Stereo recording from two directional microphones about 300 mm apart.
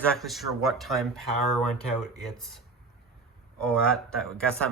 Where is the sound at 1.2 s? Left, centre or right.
Right.